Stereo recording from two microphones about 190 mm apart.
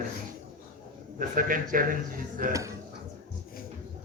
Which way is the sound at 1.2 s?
45° right (ahead or behind).